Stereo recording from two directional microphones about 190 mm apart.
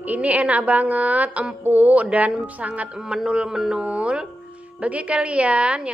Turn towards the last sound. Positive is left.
turn(degrees=-5)  # may be behind; listen again after turning